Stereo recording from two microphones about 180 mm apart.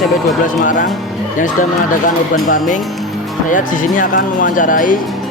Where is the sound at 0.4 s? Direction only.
45° left (ahead or behind).